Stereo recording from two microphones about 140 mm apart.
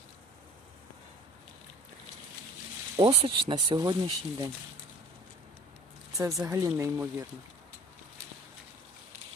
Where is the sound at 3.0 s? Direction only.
40° right (ahead or behind).